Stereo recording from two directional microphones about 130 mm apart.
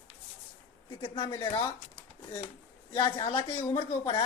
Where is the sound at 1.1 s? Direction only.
25° left (ahead or behind).